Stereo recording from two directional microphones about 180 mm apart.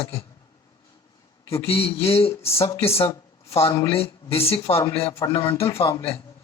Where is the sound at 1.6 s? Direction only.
35° left (ahead or behind).